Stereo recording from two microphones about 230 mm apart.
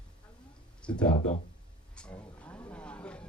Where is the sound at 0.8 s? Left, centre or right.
Centre.